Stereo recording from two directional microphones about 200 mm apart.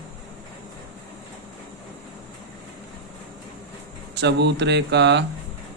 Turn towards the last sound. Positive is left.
turn(degrees=-60)  # may be behind; listen again after turning